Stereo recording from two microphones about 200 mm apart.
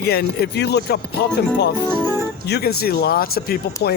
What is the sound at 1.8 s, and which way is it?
Music, 10° right (ahead or behind).